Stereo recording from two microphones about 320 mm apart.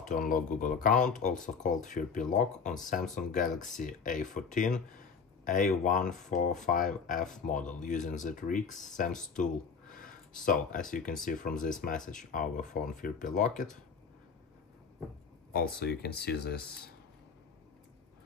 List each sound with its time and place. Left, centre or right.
0.0 s speech: left
15.5 s speech: left